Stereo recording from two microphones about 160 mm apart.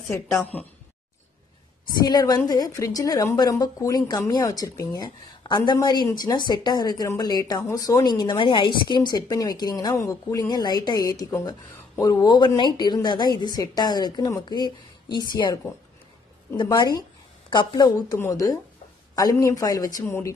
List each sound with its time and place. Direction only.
0.1 s a woman's voice: 15° left (ahead or behind)
2.0 s speech: 25° left (ahead or behind)